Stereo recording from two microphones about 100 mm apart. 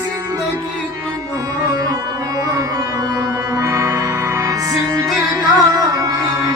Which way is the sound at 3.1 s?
35° right (ahead or behind).